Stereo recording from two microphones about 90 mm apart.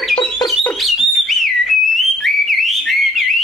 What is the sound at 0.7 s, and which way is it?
Bird, centre (ahead or behind).